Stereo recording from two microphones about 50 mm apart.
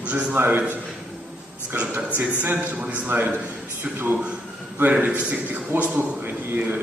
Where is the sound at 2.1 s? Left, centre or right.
Right.